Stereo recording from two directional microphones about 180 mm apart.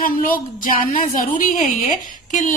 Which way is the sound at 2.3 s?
45° left (ahead or behind).